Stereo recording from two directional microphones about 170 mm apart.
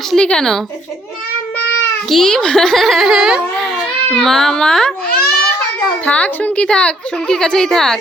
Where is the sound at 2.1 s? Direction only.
Centre (ahead or behind).